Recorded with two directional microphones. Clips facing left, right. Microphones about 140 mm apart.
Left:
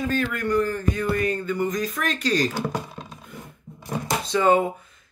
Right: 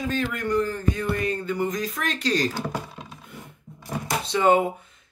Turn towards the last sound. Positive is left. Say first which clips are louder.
# even
turn(degrees=-20)  # may be behind; listen again after turning